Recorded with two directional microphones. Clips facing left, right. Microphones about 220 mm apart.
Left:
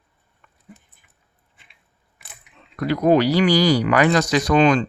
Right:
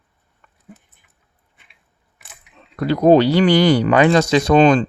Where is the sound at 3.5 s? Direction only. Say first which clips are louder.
Right 3 dB; 55° right (ahead or behind).